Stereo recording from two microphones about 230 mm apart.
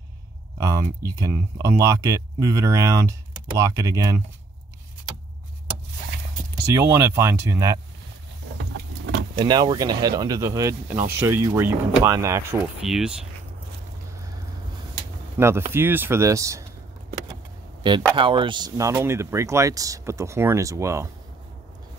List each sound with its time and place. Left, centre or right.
0.6 s speech: centre
6.7 s speech: centre
9.3 s speech: right; by 13.3 s centre
15.3 s speech: centre
18.1 s speech: right